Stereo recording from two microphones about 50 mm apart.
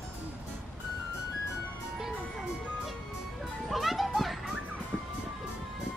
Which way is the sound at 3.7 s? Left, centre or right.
Centre.